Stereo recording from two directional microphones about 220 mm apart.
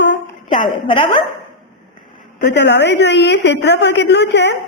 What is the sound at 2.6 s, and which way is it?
A woman's voice, 50° left (ahead or behind).